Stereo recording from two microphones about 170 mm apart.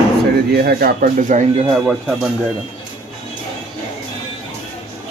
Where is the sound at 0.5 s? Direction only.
65° right (ahead or behind).